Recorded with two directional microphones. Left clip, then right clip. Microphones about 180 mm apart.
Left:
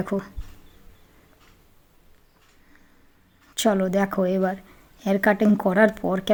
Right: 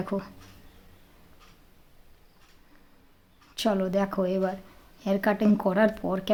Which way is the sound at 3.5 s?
25° left (ahead or behind).